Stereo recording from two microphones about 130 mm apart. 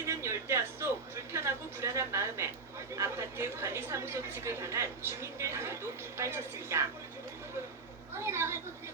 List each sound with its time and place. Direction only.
0.0 s music: 20° right (ahead or behind)
2.9 s a woman's voice: 20° right (ahead or behind)
8.1 s a woman's voice: 20° right (ahead or behind)